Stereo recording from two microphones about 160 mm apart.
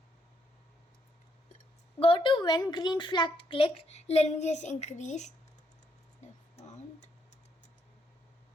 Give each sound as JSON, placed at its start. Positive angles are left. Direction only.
{"t": 2.0, "sound": "a child's voice", "side_deg": 35}